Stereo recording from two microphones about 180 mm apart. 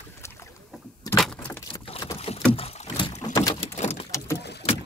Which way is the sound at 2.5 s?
35° left (ahead or behind).